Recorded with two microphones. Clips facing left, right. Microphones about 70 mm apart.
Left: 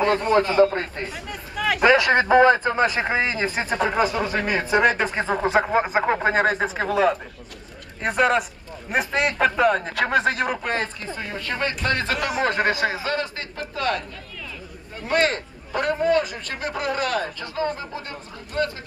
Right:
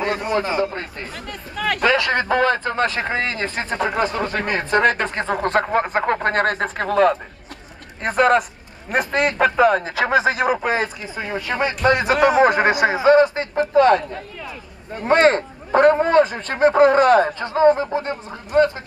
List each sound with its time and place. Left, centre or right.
0.0 s a man's voice: centre
0.7 s speech: centre
1.9 s speech: centre
12.2 s speech: right